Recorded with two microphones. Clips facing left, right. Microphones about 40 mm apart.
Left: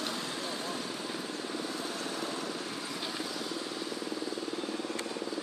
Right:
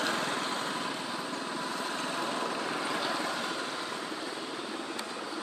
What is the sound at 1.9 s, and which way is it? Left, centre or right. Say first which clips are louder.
Vehicle: right 3 dB; right.